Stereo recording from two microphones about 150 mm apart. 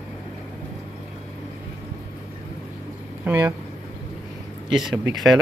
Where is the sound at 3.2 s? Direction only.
15° right (ahead or behind).